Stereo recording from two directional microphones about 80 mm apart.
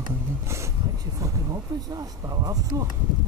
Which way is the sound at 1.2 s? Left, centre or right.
Right.